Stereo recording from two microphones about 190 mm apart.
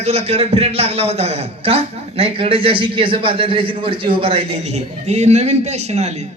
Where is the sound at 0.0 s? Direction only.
35° right (ahead or behind).